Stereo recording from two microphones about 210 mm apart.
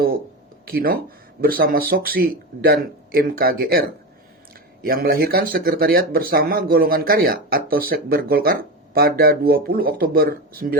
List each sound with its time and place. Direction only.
0.7 s speech: 45° right (ahead or behind)
4.9 s speech: 45° right (ahead or behind)